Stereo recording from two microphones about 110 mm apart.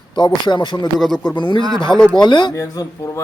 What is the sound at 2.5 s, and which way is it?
Speech, 30° left (ahead or behind).